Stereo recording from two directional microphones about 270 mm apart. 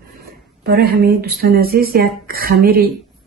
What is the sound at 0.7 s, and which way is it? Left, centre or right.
Speech, right.